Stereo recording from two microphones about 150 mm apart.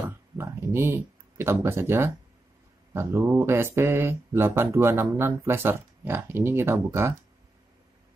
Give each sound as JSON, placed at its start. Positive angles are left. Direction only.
{"t": 0.4, "sound": "speech", "side_deg": -15}